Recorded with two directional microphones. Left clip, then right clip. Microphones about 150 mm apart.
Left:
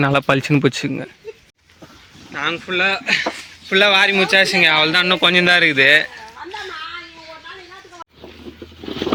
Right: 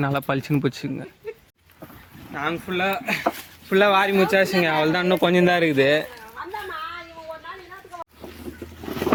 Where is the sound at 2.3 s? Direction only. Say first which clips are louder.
Left 6 dB; 90° right; by 6.1 s 35° right (ahead or behind).